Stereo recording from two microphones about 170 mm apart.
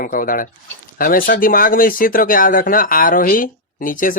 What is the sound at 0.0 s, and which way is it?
Speech, 55° left (ahead or behind).